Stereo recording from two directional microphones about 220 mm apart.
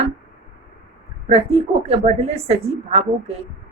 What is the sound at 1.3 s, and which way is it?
A woman's voice, 25° right (ahead or behind).